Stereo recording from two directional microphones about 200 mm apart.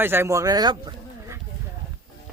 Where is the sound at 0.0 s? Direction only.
10° right (ahead or behind).